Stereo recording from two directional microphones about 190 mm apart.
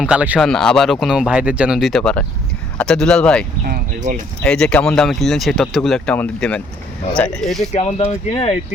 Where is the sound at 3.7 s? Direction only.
45° right (ahead or behind).